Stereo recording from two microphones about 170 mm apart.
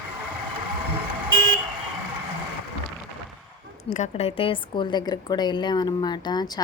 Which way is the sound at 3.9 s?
40° left (ahead or behind).